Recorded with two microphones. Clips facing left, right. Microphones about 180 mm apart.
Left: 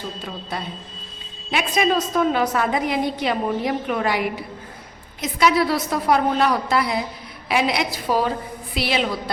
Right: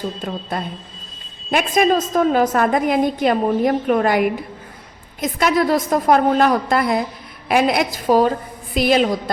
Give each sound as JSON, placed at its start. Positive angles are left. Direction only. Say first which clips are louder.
{"t": 0.2, "sound": "a woman's voice", "louder": "right 7 dB", "side_deg": -45}
{"t": 1.5, "sound": "a woman's voice", "louder": "right 4 dB", "side_deg": -50}